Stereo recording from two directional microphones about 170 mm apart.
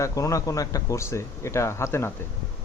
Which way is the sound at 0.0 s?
20° left (ahead or behind).